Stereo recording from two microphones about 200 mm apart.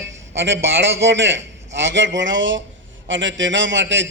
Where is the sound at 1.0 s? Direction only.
65° right (ahead or behind).